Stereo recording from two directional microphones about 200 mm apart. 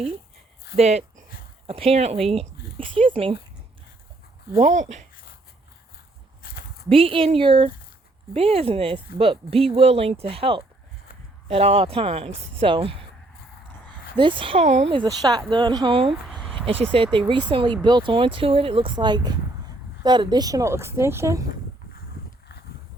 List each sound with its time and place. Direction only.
0.8 s speech: 35° right (ahead or behind)
4.6 s speech: 35° right (ahead or behind)
6.4 s a sound: 45° left (ahead or behind)
6.8 s speech: 30° right (ahead or behind)
14.2 s speech: 25° right (ahead or behind)
16.5 s vehicle: 25° right (ahead or behind)
16.9 s a woman's voice: 25° right (ahead or behind)